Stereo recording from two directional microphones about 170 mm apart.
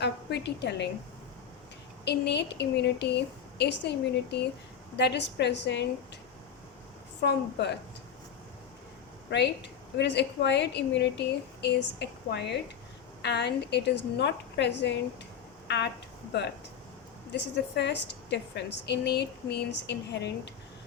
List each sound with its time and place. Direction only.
0.0 s a woman's voice: 80° left
2.0 s a woman's voice: 90° left
7.2 s a woman's voice: 80° left
10.0 s a woman's voice: 90° left
17.3 s a woman's voice: 90° left